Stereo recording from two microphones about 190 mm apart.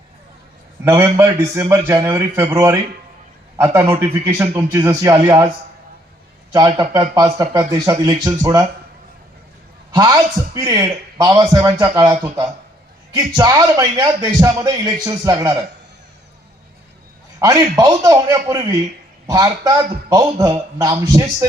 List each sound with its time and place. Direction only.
0.9 s a man's voice: 15° right (ahead or behind)
6.7 s a man's voice: 20° right (ahead or behind)
9.9 s a man's voice: 20° right (ahead or behind)
17.4 s a man's voice: 20° right (ahead or behind)